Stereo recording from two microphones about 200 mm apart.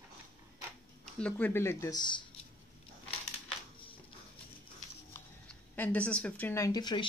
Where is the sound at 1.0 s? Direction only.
5° left (ahead or behind); by 2.2 s 20° left (ahead or behind).